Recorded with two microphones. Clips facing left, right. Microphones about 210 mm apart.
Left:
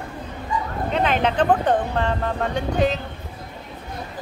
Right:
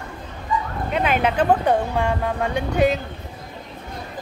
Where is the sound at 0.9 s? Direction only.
10° right (ahead or behind).